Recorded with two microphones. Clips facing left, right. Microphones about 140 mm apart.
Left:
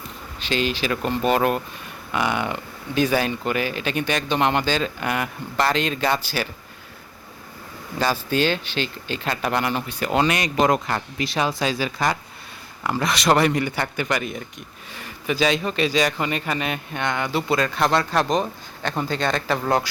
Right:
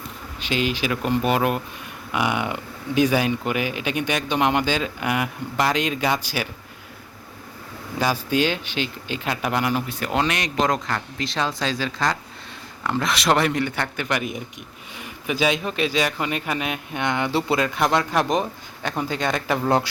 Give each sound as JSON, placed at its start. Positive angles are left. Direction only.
{"t": 0.3, "sound": "speech", "side_deg": -10}
{"t": 7.9, "sound": "speech", "side_deg": -10}
{"t": 17.0, "sound": "speech", "side_deg": -20}